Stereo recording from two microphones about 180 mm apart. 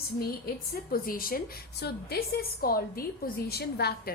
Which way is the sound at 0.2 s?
55° left (ahead or behind).